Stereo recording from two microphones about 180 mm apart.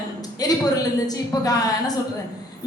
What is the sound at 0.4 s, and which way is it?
A woman's voice, 20° left (ahead or behind).